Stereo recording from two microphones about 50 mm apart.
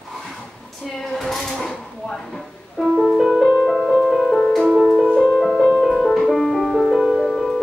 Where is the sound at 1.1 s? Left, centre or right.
Centre.